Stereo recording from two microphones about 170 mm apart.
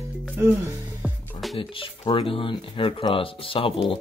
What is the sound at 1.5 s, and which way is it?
Speech, 30° left (ahead or behind).